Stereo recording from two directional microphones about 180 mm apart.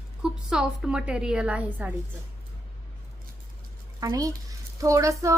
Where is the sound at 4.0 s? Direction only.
20° right (ahead or behind).